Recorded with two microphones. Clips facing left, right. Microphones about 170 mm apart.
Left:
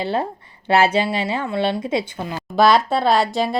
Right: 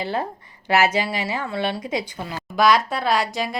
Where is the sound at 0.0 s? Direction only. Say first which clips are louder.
Left 3 dB; 25° left (ahead or behind).